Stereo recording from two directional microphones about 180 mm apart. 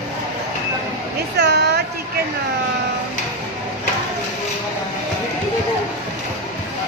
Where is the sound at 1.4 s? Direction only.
65° right (ahead or behind).